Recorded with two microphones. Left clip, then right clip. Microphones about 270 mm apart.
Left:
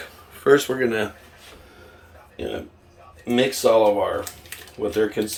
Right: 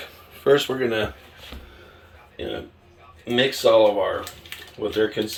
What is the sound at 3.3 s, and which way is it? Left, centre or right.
Speech, centre.